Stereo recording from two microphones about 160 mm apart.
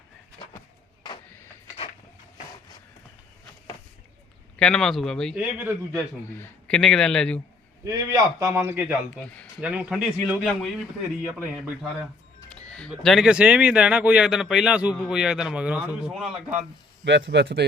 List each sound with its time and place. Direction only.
4.6 s speech: 5° left (ahead or behind)
5.4 s a man's voice: 10° right (ahead or behind)
6.3 s speech: 10° left (ahead or behind)
7.9 s a man's voice: 20° right (ahead or behind); by 10.7 s centre (ahead or behind)
12.6 s speech: 5° left (ahead or behind)
17.0 s a man's voice: 90° right